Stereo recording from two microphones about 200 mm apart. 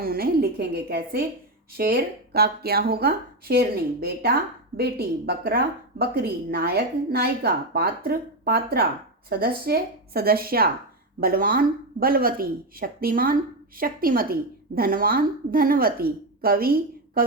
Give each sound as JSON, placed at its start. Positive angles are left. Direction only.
{"t": 0.0, "sound": "a woman's voice", "side_deg": -50}